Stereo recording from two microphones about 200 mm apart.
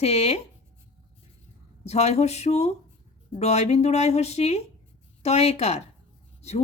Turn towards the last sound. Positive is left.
turn(degrees=35)  # may be behind; listen again after turning